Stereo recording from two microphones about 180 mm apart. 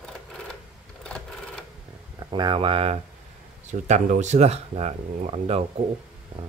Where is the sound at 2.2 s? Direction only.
25° right (ahead or behind).